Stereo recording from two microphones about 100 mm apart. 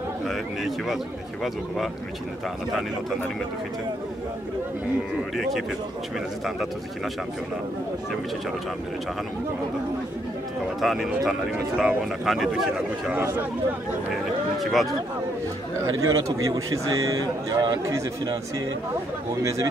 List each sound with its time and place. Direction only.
0.3 s a man's voice: centre (ahead or behind)
5.3 s a man's voice: centre (ahead or behind)
10.8 s a man's voice: centre (ahead or behind)
14.6 s speech: centre (ahead or behind)
15.8 s a man's voice: 35° right (ahead or behind)